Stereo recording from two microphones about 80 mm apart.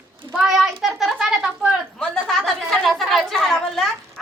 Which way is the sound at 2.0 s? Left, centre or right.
Centre.